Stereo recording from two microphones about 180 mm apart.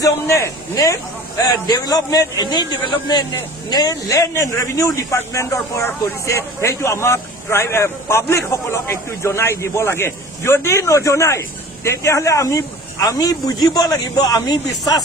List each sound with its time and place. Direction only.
0.0 s a man's voice: 15° left (ahead or behind)